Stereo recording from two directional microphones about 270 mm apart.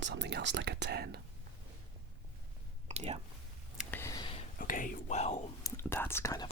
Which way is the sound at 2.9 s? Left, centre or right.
Right.